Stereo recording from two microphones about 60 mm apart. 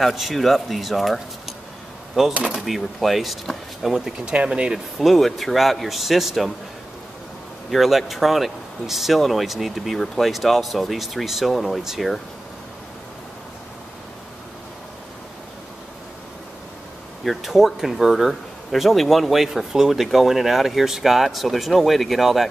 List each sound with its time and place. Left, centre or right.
0.0 s speech: centre
2.6 s speech: centre
4.3 s speech: centre
4.9 s speech: centre
7.7 s speech: centre
17.2 s speech: centre